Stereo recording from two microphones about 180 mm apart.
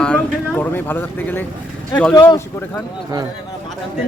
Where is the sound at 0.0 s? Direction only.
10° left (ahead or behind).